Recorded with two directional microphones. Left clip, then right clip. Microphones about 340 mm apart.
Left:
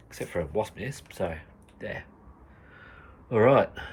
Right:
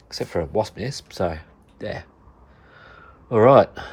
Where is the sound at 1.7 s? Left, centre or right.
Centre.